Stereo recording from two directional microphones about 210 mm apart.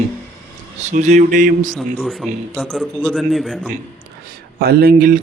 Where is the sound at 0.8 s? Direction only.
35° right (ahead or behind).